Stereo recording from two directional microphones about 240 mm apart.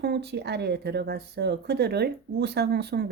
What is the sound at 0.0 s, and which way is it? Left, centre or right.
A woman's voice, right.